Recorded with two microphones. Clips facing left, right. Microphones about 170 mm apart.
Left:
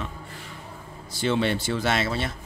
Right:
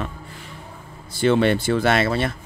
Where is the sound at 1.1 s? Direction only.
55° right (ahead or behind).